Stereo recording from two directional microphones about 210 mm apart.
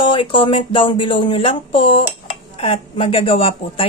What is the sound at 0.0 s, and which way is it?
Speech, 25° left (ahead or behind).